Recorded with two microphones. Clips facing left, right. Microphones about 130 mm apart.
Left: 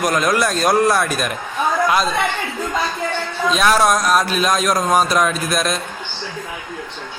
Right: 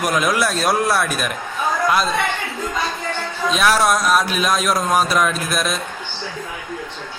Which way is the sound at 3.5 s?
Centre (ahead or behind).